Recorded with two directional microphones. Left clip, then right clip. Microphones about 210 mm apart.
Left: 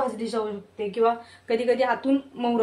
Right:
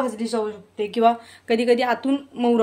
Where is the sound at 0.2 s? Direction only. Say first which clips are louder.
Right 3 dB; 55° right (ahead or behind).